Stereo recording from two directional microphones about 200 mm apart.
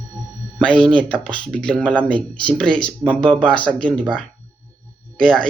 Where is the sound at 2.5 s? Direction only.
5° left (ahead or behind).